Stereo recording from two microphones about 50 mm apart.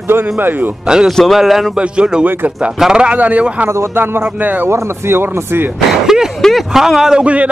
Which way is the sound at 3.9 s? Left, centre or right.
Right.